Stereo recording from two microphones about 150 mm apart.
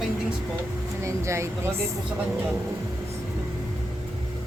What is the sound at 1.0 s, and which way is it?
Speech, 20° right (ahead or behind).